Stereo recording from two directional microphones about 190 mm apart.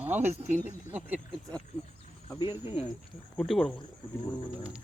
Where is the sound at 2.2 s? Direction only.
20° left (ahead or behind).